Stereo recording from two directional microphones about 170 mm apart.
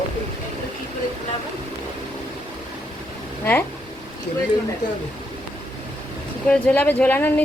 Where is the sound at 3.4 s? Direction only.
15° left (ahead or behind).